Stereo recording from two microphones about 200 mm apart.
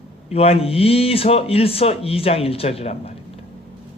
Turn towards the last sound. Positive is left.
turn(degrees=30)  # may be behind; listen again after turning